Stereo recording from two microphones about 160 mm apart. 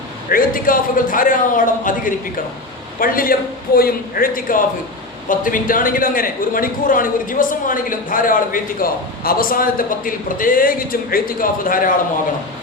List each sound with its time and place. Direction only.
0.3 s a man's voice: 60° left (ahead or behind)